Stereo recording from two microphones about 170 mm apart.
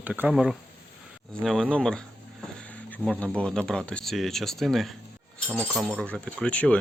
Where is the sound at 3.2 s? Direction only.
5° left (ahead or behind).